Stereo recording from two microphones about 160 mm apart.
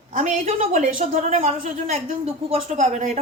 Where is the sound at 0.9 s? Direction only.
55° right (ahead or behind).